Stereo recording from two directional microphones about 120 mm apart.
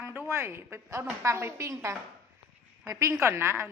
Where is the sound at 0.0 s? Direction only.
15° right (ahead or behind).